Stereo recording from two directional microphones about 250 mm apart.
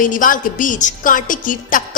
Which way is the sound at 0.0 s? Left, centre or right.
Left.